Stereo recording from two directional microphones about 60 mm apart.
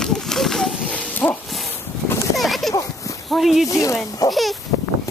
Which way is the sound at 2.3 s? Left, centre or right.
Centre.